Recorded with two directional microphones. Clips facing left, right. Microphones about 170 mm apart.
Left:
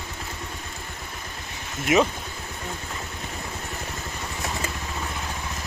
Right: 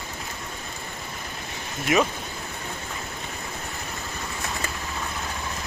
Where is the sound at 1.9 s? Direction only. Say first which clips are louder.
Left 2 dB; 20° left (ahead or behind).